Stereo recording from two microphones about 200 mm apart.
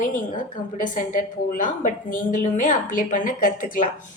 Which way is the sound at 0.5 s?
40° left (ahead or behind).